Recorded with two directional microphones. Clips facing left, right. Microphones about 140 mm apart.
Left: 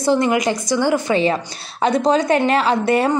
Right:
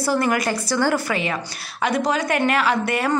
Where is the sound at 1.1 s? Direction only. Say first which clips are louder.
Left 7 dB; 30° left (ahead or behind).